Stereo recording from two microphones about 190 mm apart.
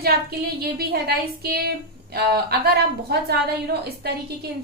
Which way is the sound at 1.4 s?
55° right (ahead or behind).